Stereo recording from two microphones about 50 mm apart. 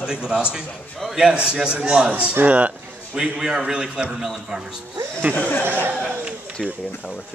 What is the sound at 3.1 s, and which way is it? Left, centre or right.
A man's voice, centre.